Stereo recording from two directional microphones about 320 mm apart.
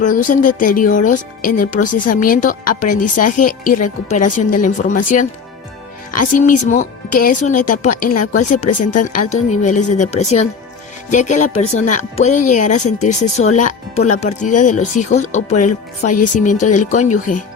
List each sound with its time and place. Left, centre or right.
0.0 s speech: left
8.2 s speech: left
9.1 s speech: left